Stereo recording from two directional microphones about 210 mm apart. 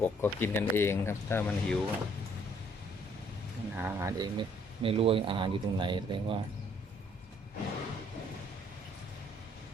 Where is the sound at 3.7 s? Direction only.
10° right (ahead or behind).